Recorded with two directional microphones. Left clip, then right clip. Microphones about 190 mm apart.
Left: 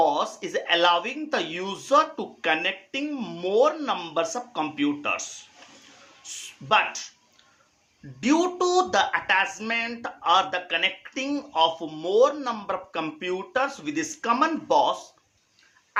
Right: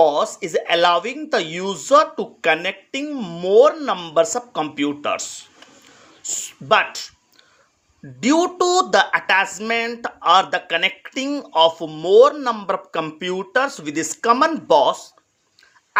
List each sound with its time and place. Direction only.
0.0 s a sound: 40° right (ahead or behind)
0.3 s speech: 40° right (ahead or behind)
8.2 s speech: 40° right (ahead or behind)